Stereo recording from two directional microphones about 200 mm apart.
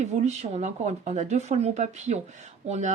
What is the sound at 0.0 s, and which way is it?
Speech, 35° right (ahead or behind).